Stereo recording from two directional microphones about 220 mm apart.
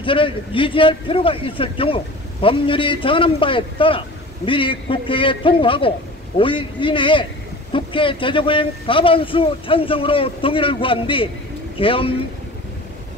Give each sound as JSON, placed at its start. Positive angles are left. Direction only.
{"t": 0.0, "sound": "speech", "side_deg": 25}